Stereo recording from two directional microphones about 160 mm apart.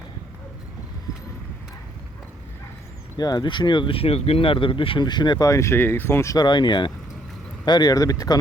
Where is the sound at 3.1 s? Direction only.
25° left (ahead or behind).